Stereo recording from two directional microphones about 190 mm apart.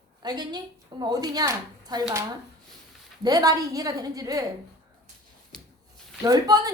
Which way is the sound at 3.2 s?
20° right (ahead or behind).